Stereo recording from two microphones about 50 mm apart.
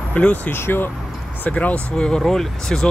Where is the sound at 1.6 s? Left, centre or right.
Left.